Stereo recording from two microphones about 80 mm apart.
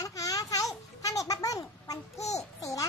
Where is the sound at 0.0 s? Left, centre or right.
Left.